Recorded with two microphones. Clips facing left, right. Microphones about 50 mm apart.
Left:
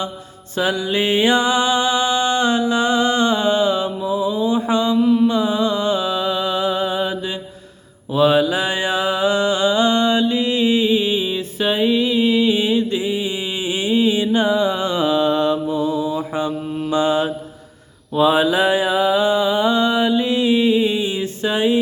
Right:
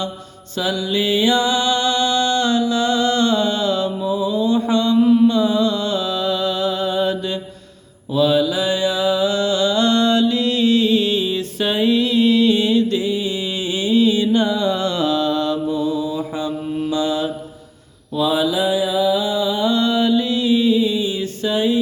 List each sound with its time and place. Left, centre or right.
0.5 s music: left
4.9 s mantra: centre
5.3 s a sound: left
8.1 s mantra: left